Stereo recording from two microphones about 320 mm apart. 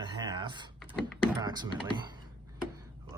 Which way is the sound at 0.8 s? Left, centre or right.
Centre.